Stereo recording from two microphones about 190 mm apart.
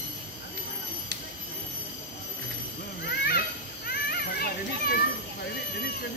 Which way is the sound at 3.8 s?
55° left (ahead or behind).